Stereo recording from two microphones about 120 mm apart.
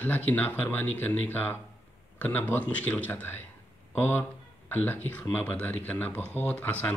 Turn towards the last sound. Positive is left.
turn(degrees=15)  # may be behind; listen again after turning